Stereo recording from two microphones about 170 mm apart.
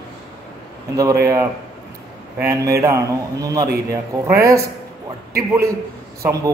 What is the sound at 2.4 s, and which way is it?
A man's voice, 15° right (ahead or behind).